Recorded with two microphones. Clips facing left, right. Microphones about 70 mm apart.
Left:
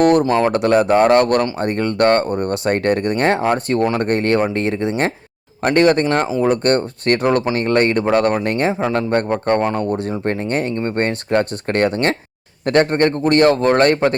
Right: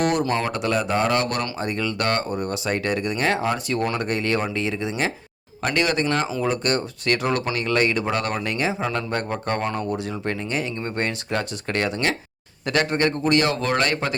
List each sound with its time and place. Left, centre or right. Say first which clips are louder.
0.0 s a man's voice: left 8 dB; left
0.5 s a man's voice: left 9 dB; left